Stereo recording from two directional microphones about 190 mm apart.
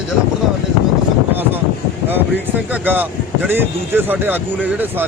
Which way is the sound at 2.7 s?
10° right (ahead or behind).